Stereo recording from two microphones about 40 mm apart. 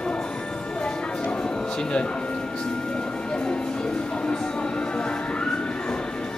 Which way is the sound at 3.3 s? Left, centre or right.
Left.